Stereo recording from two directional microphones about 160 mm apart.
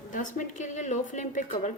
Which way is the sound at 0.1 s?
55° left (ahead or behind).